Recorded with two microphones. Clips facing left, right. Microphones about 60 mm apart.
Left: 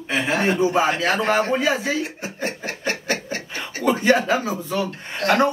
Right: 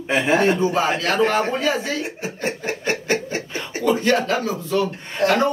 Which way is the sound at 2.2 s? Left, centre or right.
Right.